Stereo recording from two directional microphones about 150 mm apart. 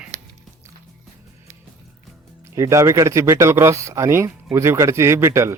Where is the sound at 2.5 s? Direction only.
20° right (ahead or behind).